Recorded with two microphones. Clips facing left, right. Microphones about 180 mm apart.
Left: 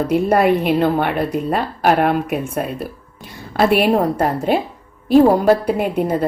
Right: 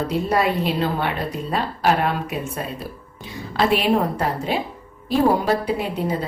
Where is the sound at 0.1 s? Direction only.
55° left (ahead or behind).